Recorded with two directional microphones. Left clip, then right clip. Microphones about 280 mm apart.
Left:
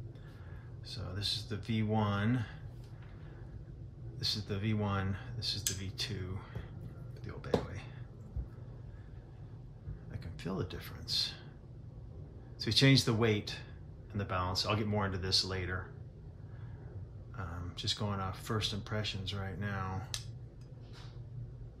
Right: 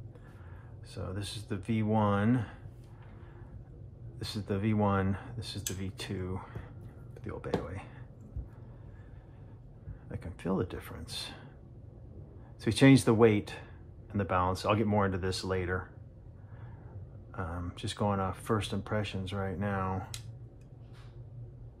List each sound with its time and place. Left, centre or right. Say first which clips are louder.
0.9 s speech: left 3 dB; centre
4.2 s speech: right 1 dB; centre
10.1 s speech: right 7 dB; centre
12.5 s speech: right 4 dB; centre
17.3 s speech: right 6 dB; centre